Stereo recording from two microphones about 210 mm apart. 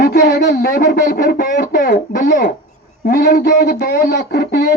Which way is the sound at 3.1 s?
50° left (ahead or behind).